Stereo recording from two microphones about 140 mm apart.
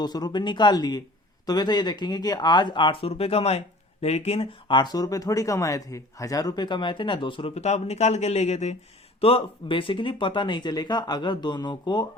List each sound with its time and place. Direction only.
0.0 s speech: 30° left (ahead or behind); by 4.4 s 50° left (ahead or behind)
4.7 s speech: 30° left (ahead or behind)
7.5 s speech: 50° left (ahead or behind)
9.2 s speech: 40° left (ahead or behind)